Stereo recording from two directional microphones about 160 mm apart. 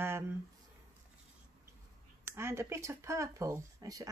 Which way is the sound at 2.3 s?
15° right (ahead or behind).